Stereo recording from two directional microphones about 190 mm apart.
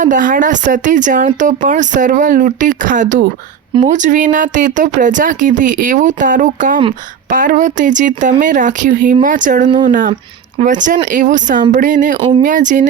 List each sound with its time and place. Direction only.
0.0 s speech: 45° right (ahead or behind)